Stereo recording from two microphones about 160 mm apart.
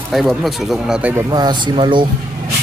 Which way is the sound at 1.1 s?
25° right (ahead or behind).